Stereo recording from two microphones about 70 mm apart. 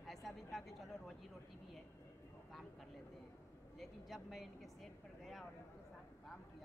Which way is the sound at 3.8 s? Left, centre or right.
Centre.